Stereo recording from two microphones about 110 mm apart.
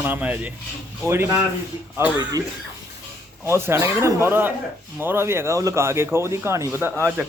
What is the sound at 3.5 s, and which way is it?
Speech, 20° right (ahead or behind).